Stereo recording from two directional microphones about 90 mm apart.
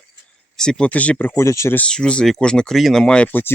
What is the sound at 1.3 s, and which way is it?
Speech, 35° left (ahead or behind).